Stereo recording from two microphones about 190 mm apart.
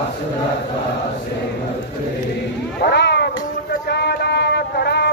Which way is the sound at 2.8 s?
65° left (ahead or behind).